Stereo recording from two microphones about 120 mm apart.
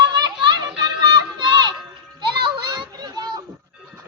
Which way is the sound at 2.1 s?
40° right (ahead or behind).